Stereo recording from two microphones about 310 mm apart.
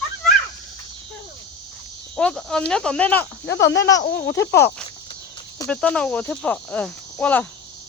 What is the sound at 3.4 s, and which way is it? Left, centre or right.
Speech, left.